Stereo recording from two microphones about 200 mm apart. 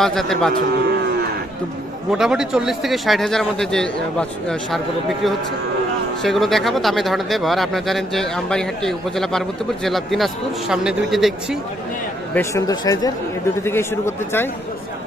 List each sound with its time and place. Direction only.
0.0 s speech: centre (ahead or behind)
2.0 s speech: 5° right (ahead or behind)
12.4 s speech: 15° left (ahead or behind)